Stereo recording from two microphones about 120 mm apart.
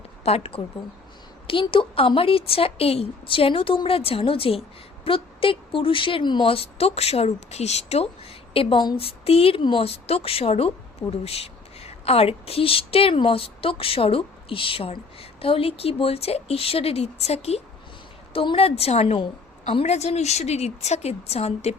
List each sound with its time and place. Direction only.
0.3 s a woman's voice: 55° left (ahead or behind)
1.5 s a woman's voice: 45° left (ahead or behind)